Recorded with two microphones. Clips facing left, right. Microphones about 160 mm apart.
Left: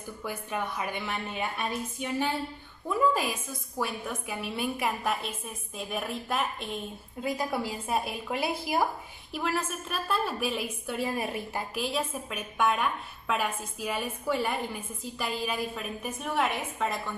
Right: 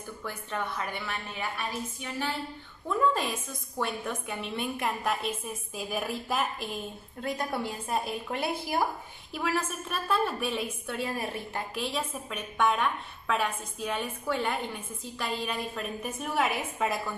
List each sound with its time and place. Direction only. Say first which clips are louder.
0.2 s speech: left 2 dB; 10° left (ahead or behind)
2.9 s a woman's voice: left 1 dB; 5° left (ahead or behind)